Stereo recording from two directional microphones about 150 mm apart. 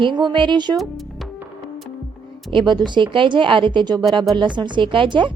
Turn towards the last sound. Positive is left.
turn(degrees=-30)  # may be behind; listen again after turning